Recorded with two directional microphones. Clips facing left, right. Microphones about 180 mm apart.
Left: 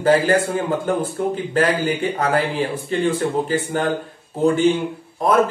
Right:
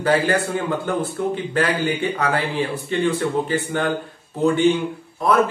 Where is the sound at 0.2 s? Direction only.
45° left (ahead or behind).